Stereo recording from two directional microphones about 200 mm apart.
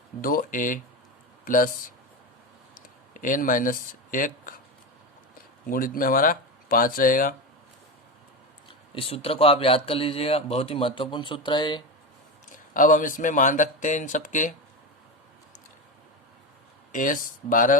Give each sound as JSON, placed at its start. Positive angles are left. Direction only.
{"t": 0.2, "sound": "speech", "side_deg": 45}
{"t": 3.2, "sound": "speech", "side_deg": 40}
{"t": 5.6, "sound": "speech", "side_deg": 45}
{"t": 8.6, "sound": "a man's voice", "side_deg": 30}
{"t": 12.5, "sound": "speech", "side_deg": 40}
{"t": 16.9, "sound": "speech", "side_deg": 40}